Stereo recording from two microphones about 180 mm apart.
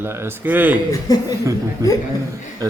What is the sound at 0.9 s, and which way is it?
Speech, 20° left (ahead or behind).